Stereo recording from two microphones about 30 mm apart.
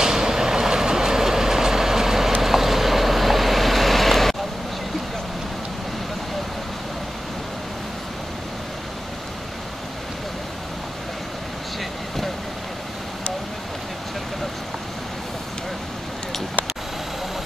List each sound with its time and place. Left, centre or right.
0.0 s vehicle: centre